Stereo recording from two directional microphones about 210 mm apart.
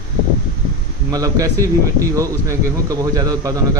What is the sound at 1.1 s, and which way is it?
A man's voice, 15° right (ahead or behind).